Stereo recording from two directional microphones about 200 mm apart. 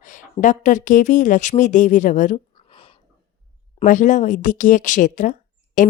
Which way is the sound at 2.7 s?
25° left (ahead or behind).